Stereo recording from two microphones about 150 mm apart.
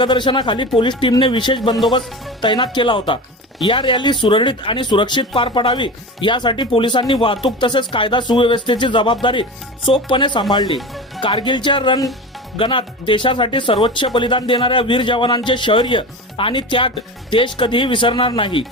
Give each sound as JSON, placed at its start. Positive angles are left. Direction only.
{"t": 0.0, "sound": "speech", "side_deg": 30}